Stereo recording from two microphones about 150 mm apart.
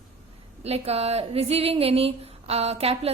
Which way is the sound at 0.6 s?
40° right (ahead or behind).